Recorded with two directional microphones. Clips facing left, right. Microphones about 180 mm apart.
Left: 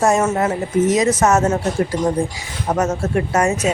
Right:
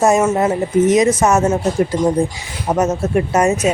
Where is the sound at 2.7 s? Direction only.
20° right (ahead or behind).